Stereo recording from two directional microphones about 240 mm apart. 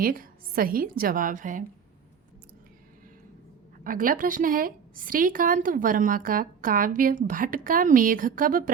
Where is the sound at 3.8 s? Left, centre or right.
Right.